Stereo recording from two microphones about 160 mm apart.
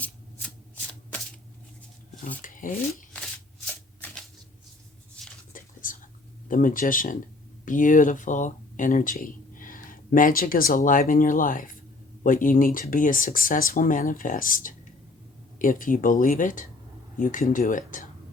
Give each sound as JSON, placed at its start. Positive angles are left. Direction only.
{"t": 0.0, "sound": "shuffling cards", "side_deg": 10}
{"t": 2.4, "sound": "speech", "side_deg": 55}
{"t": 5.2, "sound": "a sound", "side_deg": 5}
{"t": 5.5, "sound": "whispering", "side_deg": 55}
{"t": 6.5, "sound": "speech", "side_deg": 55}